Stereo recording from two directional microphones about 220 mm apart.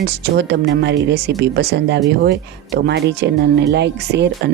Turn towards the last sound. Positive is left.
turn(degrees=-50)  # may be behind; listen again after turning